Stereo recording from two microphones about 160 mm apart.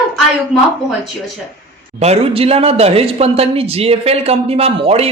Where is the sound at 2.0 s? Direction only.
40° right (ahead or behind).